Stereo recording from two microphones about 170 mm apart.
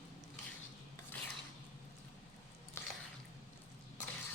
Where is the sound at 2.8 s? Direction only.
15° left (ahead or behind).